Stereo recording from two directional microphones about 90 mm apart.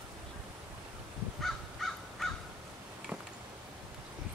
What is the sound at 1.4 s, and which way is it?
Crow, centre (ahead or behind).